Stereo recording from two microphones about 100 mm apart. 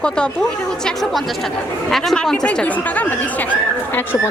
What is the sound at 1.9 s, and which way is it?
A woman's voice, 5° left (ahead or behind).